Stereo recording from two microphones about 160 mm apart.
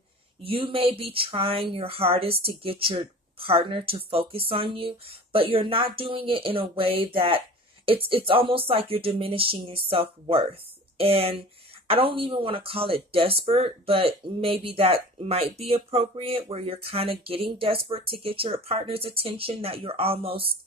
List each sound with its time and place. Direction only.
0.4 s speech: 35° right (ahead or behind)